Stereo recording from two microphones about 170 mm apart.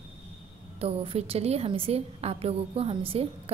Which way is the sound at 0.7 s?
35° right (ahead or behind).